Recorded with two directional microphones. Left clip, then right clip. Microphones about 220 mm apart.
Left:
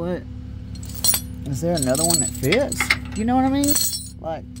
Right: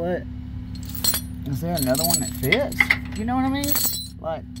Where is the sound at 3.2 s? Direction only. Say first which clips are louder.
Left 4 dB; 35° left (ahead or behind).